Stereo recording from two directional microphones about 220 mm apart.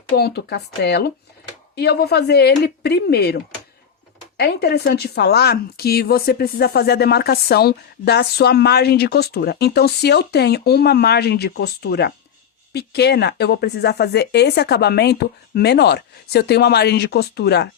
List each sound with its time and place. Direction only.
0.2 s speech: 45° left (ahead or behind)